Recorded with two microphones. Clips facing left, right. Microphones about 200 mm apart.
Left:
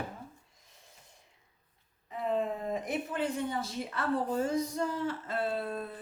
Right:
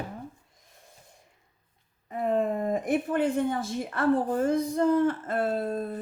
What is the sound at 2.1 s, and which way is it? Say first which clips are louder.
Speech: right 5 dB; 50° right (ahead or behind).